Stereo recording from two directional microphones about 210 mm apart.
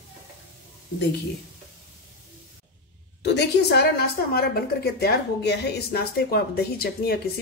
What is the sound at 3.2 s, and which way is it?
A woman's voice, 50° left (ahead or behind).